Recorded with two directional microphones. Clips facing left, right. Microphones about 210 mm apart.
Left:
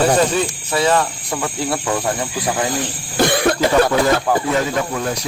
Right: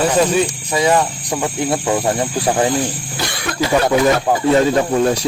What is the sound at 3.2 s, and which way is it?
Cough, 50° left (ahead or behind).